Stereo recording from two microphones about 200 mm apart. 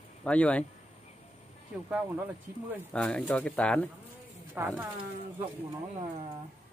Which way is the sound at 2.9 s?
5° left (ahead or behind).